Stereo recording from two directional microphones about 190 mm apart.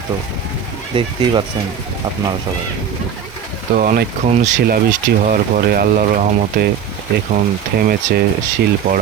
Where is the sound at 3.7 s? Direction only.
45° right (ahead or behind).